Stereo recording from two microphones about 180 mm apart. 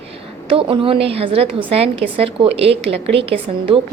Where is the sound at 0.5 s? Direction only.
30° right (ahead or behind).